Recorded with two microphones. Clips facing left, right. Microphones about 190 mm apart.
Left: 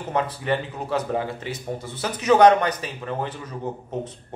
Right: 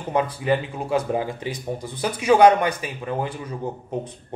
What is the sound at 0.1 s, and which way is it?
Speech, 10° right (ahead or behind).